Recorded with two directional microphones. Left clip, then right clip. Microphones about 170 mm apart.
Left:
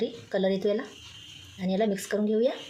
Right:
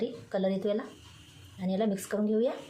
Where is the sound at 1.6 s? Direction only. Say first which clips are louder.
Left 4 dB; 45° left (ahead or behind).